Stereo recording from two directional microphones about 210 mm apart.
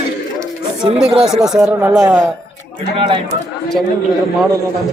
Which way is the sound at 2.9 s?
25° right (ahead or behind).